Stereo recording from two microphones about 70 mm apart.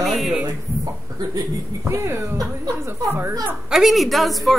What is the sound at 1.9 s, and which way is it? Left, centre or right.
Speech, right.